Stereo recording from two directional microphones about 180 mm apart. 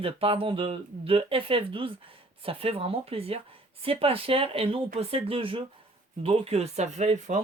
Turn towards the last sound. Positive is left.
turn(degrees=-40)  # may be behind; listen again after turning